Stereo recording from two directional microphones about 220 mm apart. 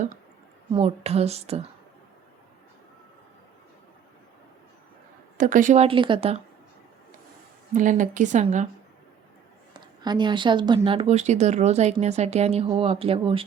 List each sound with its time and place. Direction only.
0.7 s speech: 25° right (ahead or behind)
5.4 s speech: 35° right (ahead or behind)
7.7 s speech: 35° right (ahead or behind)
9.7 s speech: 20° right (ahead or behind)